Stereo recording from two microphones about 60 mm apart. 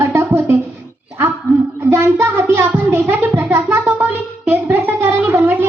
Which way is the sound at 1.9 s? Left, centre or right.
Right.